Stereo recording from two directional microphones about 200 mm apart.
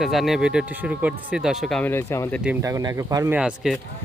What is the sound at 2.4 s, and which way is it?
Speech, 10° right (ahead or behind).